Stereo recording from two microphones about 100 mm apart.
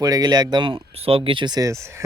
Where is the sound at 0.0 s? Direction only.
40° right (ahead or behind); by 1.5 s 60° right (ahead or behind).